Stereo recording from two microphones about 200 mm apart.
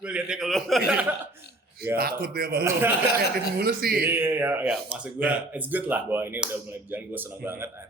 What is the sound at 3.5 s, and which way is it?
Speech, 50° right (ahead or behind).